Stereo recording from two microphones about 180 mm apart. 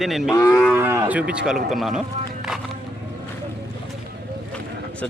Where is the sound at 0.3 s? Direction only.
15° left (ahead or behind).